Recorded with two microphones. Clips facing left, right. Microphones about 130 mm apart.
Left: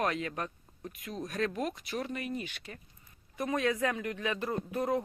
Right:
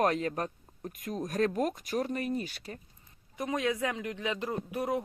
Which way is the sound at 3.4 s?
15° right (ahead or behind).